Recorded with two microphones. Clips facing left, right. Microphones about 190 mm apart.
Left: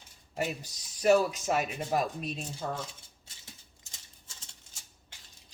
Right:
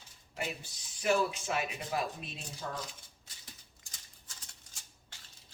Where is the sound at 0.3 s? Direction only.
40° left (ahead or behind).